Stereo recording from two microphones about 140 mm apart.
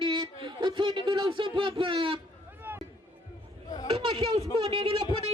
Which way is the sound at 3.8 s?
45° right (ahead or behind).